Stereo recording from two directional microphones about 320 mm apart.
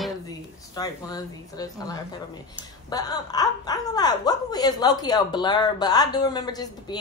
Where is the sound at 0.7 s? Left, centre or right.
Centre.